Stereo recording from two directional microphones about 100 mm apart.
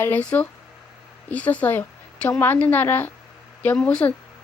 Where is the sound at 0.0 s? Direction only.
15° left (ahead or behind).